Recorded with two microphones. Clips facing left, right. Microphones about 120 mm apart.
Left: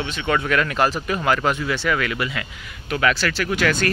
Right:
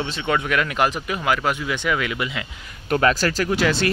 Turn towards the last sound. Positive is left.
turn(degrees=-30)  # may be behind; listen again after turning